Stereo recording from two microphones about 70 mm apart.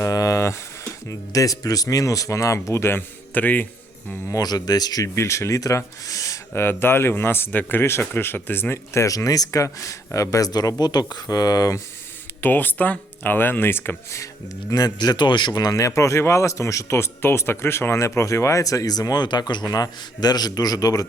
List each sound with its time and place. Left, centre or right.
0.0 s a sound: left
1.3 s speech: left
3.3 s speech: left
4.3 s speech: left
5.0 s speech: left
6.5 s speech: left
10.5 s a man's voice: left
12.4 s speech: left
14.7 s speech: left
15.7 s speech: left
19.6 s a man's voice: left